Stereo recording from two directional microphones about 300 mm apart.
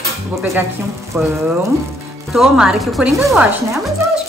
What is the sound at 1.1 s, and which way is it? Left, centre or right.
A woman's voice, centre.